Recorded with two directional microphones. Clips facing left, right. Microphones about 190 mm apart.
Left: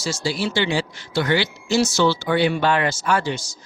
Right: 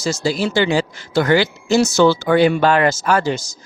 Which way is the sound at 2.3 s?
45° right (ahead or behind).